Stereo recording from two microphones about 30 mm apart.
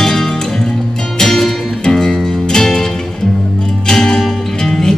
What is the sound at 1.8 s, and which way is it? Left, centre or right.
Music, centre.